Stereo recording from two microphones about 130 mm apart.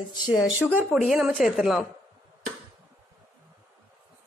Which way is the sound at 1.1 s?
5° right (ahead or behind).